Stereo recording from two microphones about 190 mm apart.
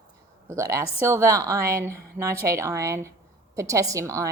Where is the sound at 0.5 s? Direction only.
15° right (ahead or behind).